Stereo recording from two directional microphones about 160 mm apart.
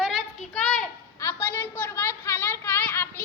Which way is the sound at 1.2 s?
15° left (ahead or behind).